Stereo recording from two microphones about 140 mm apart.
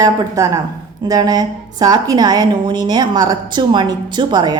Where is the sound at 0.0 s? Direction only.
25° right (ahead or behind).